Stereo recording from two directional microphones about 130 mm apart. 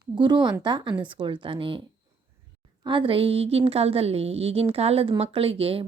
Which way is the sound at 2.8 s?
40° right (ahead or behind).